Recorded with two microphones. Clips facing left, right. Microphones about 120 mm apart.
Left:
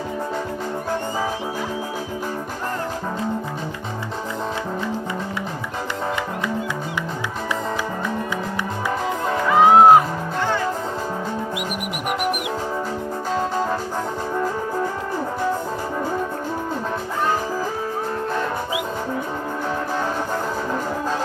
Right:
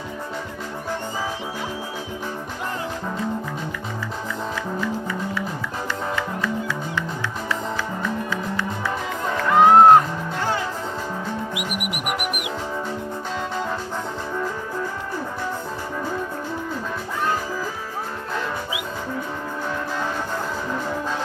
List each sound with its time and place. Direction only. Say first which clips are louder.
9.5 s music: even; centre (ahead or behind)
12.0 s music: left 6 dB; 30° left (ahead or behind)